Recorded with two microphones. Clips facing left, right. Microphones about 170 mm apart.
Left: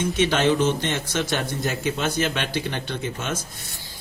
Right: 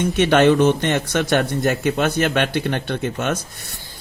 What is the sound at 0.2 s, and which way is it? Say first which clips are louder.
A man's voice: right 7 dB; 60° right (ahead or behind).